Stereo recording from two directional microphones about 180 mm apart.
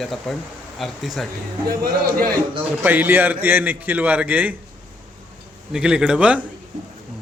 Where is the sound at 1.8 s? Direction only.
55° right (ahead or behind).